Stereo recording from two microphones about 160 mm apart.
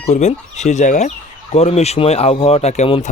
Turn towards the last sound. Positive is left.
turn(degrees=40)  # may be behind; listen again after turning